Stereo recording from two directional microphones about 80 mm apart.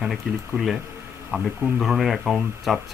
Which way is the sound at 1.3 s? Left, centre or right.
Centre.